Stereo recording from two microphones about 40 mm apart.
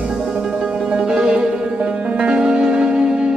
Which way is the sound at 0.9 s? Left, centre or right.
Right.